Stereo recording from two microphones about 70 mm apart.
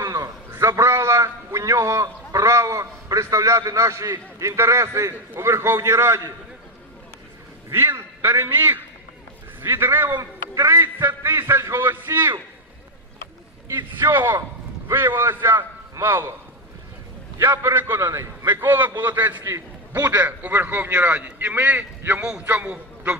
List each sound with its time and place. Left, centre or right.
0.0 s a sound: right
4.4 s a man's voice: right
7.7 s a man's voice: right
10.5 s a man's voice: right
13.9 s a man's voice: right
17.4 s a man's voice: right